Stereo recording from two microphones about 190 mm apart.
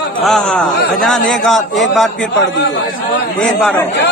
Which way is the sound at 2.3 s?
70° left (ahead or behind).